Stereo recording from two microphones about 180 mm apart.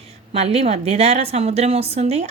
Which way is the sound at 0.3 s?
35° right (ahead or behind).